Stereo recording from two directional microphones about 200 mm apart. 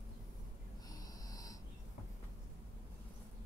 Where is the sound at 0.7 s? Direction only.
20° left (ahead or behind).